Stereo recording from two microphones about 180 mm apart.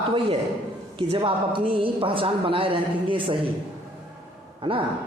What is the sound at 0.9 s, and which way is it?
A woman's voice, 30° right (ahead or behind).